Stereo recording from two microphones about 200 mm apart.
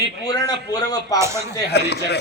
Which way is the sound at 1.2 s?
15° right (ahead or behind).